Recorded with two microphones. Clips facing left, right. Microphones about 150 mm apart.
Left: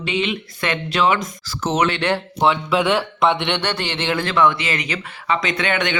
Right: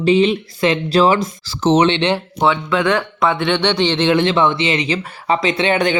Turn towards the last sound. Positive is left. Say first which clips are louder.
# right 5 dB
turn(degrees=-30)  # may be behind; listen again after turning